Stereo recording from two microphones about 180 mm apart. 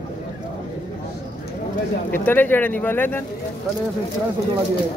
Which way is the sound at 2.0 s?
10° left (ahead or behind).